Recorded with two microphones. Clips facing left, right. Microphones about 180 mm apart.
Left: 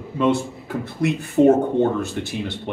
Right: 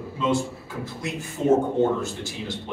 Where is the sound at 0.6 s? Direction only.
60° left (ahead or behind).